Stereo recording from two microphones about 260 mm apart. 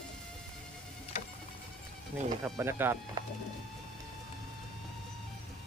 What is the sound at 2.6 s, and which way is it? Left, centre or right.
Speech, centre.